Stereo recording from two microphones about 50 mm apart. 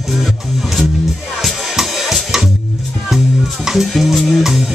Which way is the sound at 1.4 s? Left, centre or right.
Centre.